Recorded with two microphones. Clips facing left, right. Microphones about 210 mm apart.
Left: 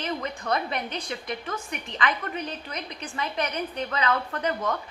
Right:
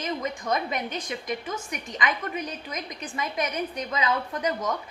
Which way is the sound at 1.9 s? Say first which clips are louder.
Even; 10° right (ahead or behind).